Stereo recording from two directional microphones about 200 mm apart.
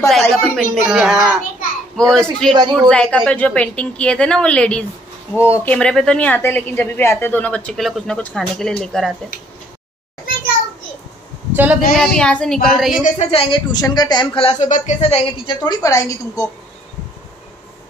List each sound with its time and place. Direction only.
0.2 s a woman's voice: centre (ahead or behind)
2.5 s speech: 20° right (ahead or behind)
2.9 s a woman's voice: 5° left (ahead or behind)
11.5 s speech: 10° right (ahead or behind)
12.0 s a woman's voice: 5° left (ahead or behind)
13.0 s speech: 30° left (ahead or behind); by 16.4 s 15° left (ahead or behind)